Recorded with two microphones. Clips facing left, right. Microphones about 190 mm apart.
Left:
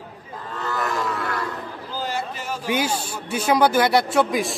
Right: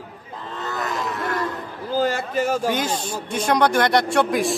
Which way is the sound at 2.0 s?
45° right (ahead or behind).